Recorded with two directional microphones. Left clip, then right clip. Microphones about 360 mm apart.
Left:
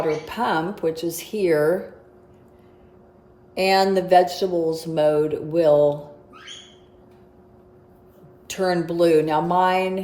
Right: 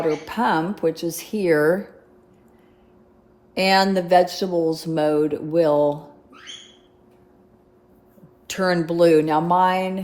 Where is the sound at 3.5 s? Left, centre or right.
Right.